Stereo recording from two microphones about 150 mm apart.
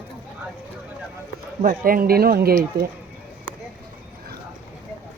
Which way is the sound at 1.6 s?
65° right (ahead or behind).